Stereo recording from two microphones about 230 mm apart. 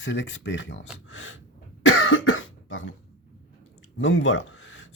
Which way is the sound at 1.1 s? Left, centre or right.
Left.